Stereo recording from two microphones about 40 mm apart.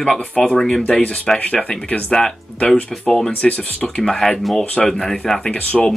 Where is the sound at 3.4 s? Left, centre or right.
Left.